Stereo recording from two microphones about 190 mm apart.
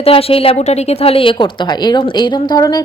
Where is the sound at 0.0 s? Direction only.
30° left (ahead or behind).